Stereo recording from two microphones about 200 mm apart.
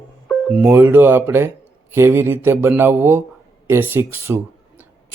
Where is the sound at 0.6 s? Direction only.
10° right (ahead or behind).